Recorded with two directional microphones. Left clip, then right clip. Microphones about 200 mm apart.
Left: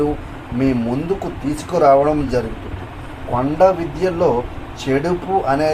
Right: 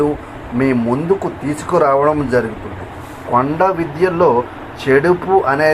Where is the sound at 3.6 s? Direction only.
15° right (ahead or behind).